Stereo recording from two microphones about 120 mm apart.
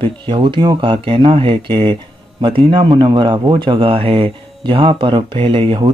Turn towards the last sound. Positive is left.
turn(degrees=-45)  # may be behind; listen again after turning